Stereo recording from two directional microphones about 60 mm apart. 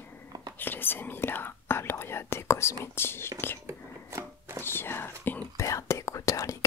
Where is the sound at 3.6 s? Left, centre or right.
Right.